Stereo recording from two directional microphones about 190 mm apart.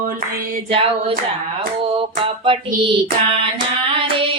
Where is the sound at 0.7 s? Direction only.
30° right (ahead or behind).